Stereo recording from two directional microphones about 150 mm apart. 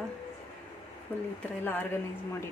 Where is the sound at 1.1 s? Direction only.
10° left (ahead or behind).